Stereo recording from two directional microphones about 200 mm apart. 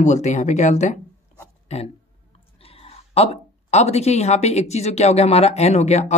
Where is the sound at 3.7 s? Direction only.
35° left (ahead or behind).